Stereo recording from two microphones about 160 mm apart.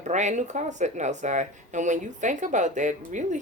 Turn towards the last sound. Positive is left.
turn(degrees=-50)  # may be behind; listen again after turning